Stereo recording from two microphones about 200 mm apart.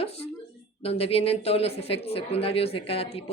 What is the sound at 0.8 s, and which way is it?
A woman's voice, 30° left (ahead or behind).